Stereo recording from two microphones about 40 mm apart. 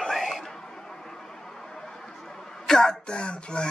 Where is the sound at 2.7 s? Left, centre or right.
Centre.